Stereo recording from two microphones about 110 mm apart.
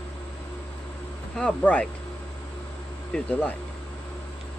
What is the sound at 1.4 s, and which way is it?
Speech, 10° left (ahead or behind).